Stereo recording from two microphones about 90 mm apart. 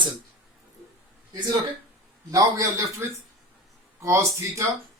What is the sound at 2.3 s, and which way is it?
A man's voice, 40° right (ahead or behind).